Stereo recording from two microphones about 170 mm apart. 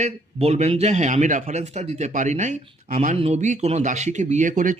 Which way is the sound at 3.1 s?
40° right (ahead or behind).